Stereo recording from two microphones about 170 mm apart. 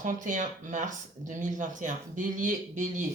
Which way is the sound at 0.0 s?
50° right (ahead or behind).